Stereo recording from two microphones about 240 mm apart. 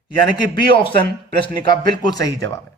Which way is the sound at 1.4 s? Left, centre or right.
Centre.